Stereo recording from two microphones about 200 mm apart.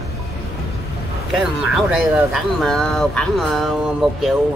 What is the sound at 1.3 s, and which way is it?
Speech, centre (ahead or behind).